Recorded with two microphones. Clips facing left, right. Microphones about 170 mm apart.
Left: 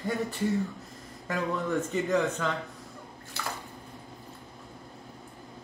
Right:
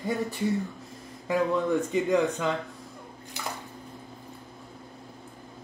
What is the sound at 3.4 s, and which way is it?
Bathtub, 15° right (ahead or behind).